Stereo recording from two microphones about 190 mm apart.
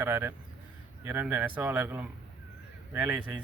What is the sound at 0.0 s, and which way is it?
Speech, 10° right (ahead or behind).